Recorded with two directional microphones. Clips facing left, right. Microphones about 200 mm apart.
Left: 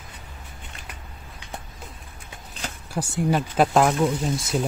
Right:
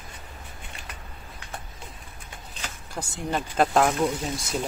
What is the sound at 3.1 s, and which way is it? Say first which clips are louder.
Speech: left 5 dB; 5° left (ahead or behind).